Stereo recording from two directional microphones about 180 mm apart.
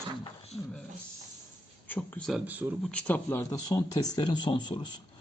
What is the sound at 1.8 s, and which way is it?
Speech, 10° left (ahead or behind).